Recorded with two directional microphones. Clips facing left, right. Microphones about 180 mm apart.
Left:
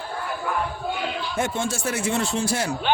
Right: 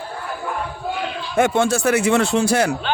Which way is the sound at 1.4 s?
75° right (ahead or behind).